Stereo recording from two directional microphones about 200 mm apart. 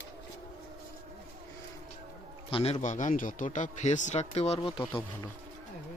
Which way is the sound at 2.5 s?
30° left (ahead or behind).